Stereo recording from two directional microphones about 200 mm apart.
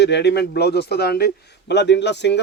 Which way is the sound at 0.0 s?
55° left (ahead or behind).